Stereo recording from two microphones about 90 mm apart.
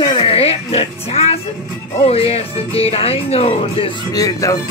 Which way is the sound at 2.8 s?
90° left.